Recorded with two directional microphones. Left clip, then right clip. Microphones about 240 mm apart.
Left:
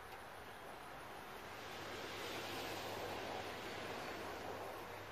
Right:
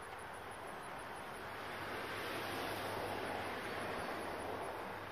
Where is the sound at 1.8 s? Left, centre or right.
Right.